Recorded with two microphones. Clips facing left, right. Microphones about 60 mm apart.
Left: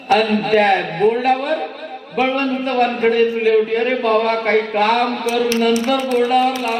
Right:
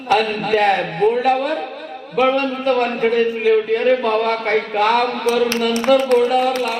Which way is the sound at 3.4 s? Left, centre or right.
Left.